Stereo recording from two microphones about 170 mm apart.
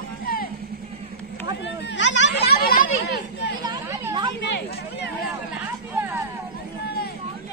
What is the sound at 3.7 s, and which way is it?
Chatter, 15° right (ahead or behind).